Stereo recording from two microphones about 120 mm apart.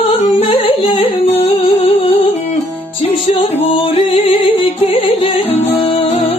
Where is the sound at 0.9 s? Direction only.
50° left (ahead or behind).